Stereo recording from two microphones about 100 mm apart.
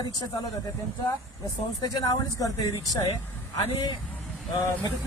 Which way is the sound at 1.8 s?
45° left (ahead or behind).